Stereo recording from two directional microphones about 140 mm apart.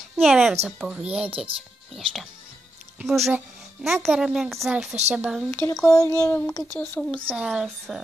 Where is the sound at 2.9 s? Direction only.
Centre (ahead or behind).